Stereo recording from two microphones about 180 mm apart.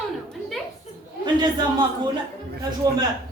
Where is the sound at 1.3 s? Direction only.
25° right (ahead or behind).